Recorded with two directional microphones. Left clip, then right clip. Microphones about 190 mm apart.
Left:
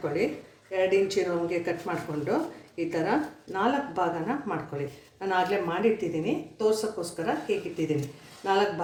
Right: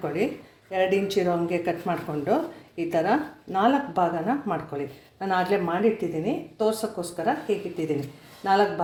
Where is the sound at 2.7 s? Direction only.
50° right (ahead or behind).